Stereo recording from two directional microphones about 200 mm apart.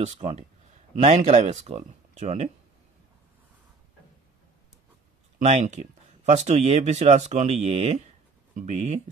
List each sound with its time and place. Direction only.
0.0 s speech: 35° right (ahead or behind)
5.4 s speech: 35° right (ahead or behind)